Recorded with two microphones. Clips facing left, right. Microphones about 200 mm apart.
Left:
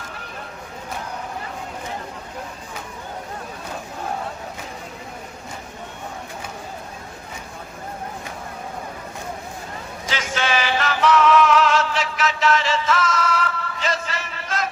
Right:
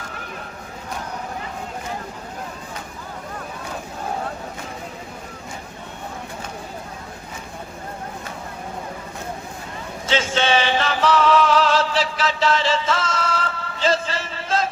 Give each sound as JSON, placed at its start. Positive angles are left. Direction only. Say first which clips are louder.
{"t": 10.1, "sound": "music", "louder": "right 4 dB", "side_deg": -25}